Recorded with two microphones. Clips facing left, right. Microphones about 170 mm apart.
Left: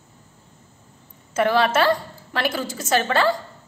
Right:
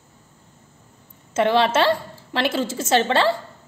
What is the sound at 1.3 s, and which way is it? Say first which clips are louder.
A woman's voice: right 1 dB; 25° right (ahead or behind).